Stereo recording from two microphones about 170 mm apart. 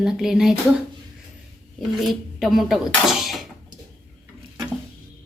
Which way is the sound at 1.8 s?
Centre (ahead or behind).